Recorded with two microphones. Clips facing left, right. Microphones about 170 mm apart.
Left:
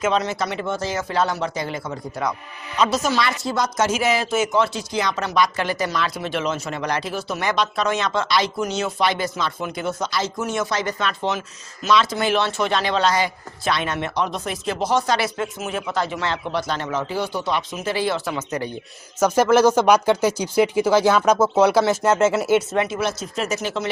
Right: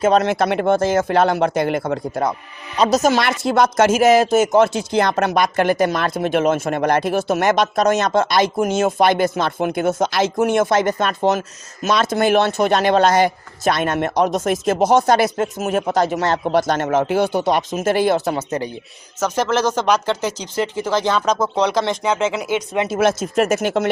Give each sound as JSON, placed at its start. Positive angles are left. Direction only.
{"t": 0.1, "sound": "speech", "side_deg": -55}
{"t": 2.7, "sound": "speech", "side_deg": -40}
{"t": 3.9, "sound": "speech", "side_deg": -45}
{"t": 19.2, "sound": "speech", "side_deg": 10}
{"t": 22.9, "sound": "speech", "side_deg": -50}